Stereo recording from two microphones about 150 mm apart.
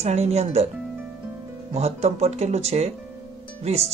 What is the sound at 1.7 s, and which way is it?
Speech, 45° right (ahead or behind).